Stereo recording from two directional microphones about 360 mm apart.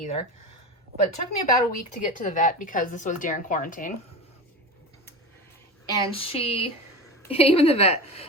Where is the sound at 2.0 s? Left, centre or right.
Left.